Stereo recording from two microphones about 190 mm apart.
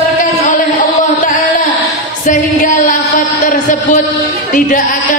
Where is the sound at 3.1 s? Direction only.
45° left (ahead or behind).